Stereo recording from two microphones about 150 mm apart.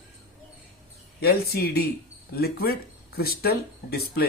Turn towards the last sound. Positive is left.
turn(degrees=90)